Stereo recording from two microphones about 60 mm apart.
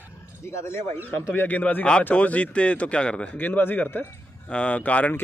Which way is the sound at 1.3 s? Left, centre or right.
Left.